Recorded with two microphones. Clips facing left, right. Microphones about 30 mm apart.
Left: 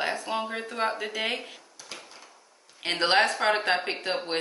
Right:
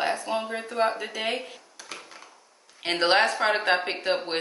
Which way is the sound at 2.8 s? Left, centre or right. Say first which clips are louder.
Right 1 dB; centre.